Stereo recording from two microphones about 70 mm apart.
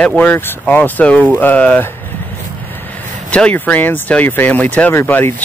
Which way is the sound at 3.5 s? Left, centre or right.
Left.